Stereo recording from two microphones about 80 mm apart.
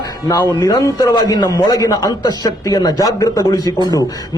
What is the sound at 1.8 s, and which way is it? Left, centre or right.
A man's voice, left.